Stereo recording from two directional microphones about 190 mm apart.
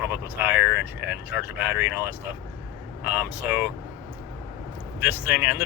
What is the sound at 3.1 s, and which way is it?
Speech, 10° right (ahead or behind).